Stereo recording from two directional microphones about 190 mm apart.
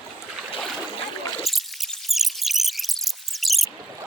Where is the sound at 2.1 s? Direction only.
Centre (ahead or behind).